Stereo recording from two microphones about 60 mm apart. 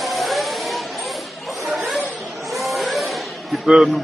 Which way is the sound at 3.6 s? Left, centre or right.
Centre.